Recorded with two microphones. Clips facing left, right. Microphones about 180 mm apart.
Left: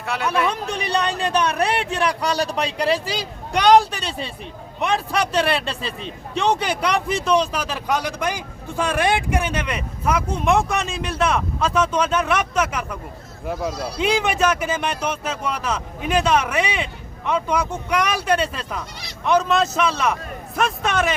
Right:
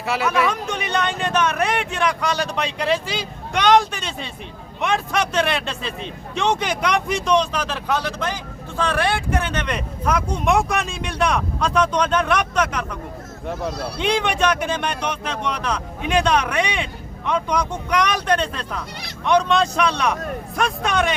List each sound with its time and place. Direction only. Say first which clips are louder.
0.0 s speech: right 3 dB; 5° right (ahead or behind)
0.4 s speech: even; 35° left (ahead or behind)
7.2 s speech: even; 5° left (ahead or behind)